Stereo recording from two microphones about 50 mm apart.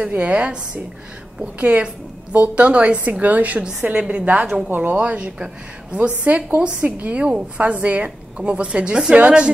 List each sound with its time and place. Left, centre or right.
0.0 s a woman's voice: right
4.6 s a woman's voice: right
4.9 s a woman's voice: right